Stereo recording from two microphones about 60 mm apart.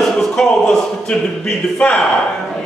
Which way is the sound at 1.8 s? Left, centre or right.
Left.